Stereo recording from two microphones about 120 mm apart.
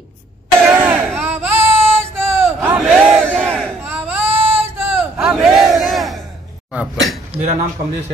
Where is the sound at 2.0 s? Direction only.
20° right (ahead or behind).